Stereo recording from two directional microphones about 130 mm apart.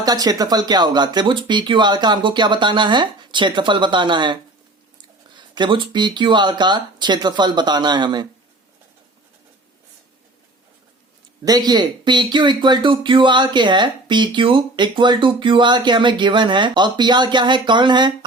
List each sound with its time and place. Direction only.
0.0 s speech: 30° right (ahead or behind)
5.4 s speech: 35° right (ahead or behind)
11.4 s speech: 30° right (ahead or behind)